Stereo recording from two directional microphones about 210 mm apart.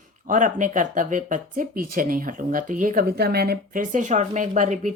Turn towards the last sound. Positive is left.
turn(degrees=-35)  # may be behind; listen again after turning